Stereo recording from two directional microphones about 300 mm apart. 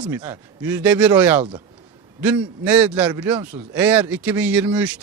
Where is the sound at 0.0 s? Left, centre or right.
Centre.